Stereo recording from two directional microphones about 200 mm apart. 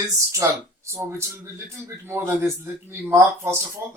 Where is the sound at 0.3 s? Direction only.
15° right (ahead or behind).